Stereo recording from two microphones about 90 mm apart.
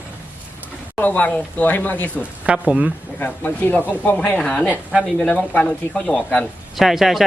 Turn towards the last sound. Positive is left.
turn(degrees=0)  # may be behind; listen again after turning